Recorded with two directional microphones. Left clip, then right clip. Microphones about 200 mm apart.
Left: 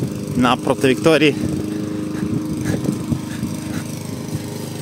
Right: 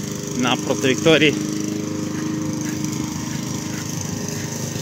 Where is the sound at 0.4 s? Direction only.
30° left (ahead or behind).